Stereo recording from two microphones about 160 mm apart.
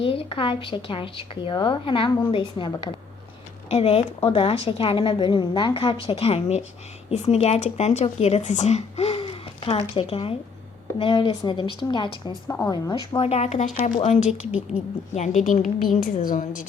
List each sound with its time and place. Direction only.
0.0 s a woman's voice: 35° left (ahead or behind)
12.5 s a woman's voice: 15° left (ahead or behind)
13.2 s a woman's voice: 40° left (ahead or behind)
14.3 s a woman's voice: 5° right (ahead or behind)
15.1 s a woman's voice: 45° left (ahead or behind)